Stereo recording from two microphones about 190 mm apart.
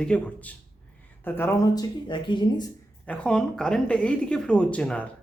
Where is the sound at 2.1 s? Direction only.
25° left (ahead or behind).